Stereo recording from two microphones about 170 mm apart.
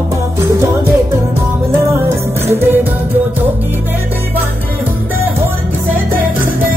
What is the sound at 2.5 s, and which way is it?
Music, 10° right (ahead or behind).